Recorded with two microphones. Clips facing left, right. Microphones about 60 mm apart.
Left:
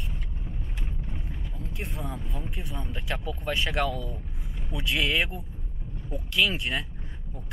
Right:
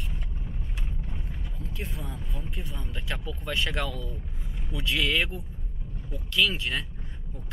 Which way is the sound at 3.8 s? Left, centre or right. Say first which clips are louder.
Left 4 dB; left.